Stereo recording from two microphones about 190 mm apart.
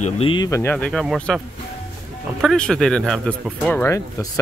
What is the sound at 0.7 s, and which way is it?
Speech, 5° left (ahead or behind).